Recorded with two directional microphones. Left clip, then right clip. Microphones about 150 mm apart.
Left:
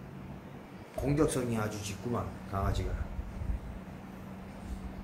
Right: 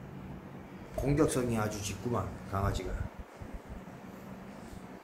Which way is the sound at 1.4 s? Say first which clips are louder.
Right 1 dB; 25° right (ahead or behind).